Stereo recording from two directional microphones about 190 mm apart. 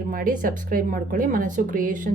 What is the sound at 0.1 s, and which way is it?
A woman's voice, 45° right (ahead or behind).